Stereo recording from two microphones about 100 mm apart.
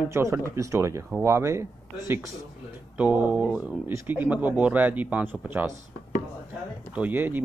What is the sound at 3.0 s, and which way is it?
A man's voice, 15° right (ahead or behind).